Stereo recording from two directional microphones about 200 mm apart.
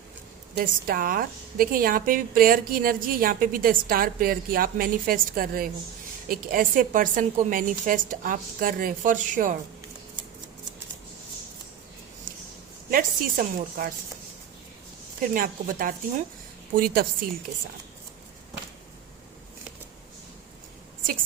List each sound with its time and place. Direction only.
0.5 s a woman's voice: 45° right (ahead or behind)
12.9 s a woman's voice: 45° right (ahead or behind)
15.2 s a woman's voice: 45° right (ahead or behind)